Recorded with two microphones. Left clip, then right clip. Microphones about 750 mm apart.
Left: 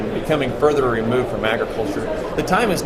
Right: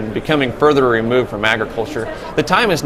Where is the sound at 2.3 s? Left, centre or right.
Right.